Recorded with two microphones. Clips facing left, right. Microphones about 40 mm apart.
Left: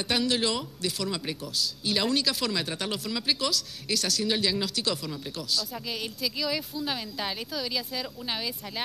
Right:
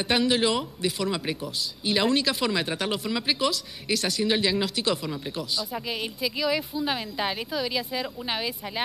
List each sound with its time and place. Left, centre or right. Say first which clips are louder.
0.0 s speech: right 4 dB; centre